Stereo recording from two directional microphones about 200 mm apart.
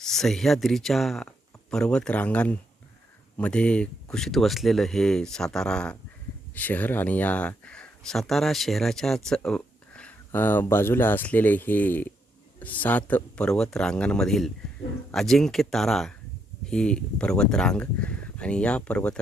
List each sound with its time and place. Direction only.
0.0 s speech: centre (ahead or behind)